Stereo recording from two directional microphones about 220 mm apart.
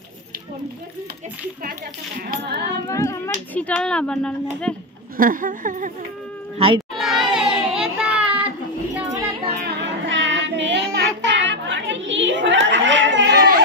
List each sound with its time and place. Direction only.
2.3 s female singing: 50° right (ahead or behind)
2.6 s a sound: 15° left (ahead or behind)
3.5 s speech: 5° left (ahead or behind)
5.1 s speech: 40° right (ahead or behind)
6.6 s speech: 25° right (ahead or behind)
7.0 s a sound: centre (ahead or behind)
7.3 s child singing: 5° right (ahead or behind)
8.9 s music: 15° right (ahead or behind)
9.6 s child singing: 55° right (ahead or behind)